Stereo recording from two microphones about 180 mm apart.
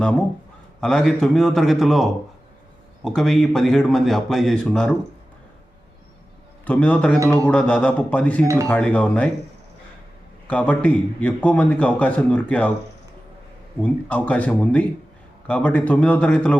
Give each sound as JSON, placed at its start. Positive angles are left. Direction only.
{"t": 0.8, "sound": "a man's voice", "side_deg": 5}
{"t": 6.7, "sound": "a man's voice", "side_deg": 10}
{"t": 10.4, "sound": "a man's voice", "side_deg": 5}
{"t": 13.8, "sound": "a man's voice", "side_deg": 10}